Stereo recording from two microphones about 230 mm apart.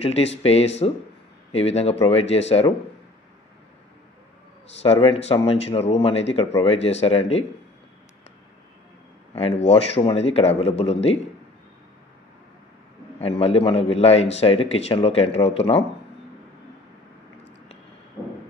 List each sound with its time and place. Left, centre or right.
0.0 s a man's voice: left
4.9 s a man's voice: left
9.7 s a man's voice: left
13.2 s a man's voice: left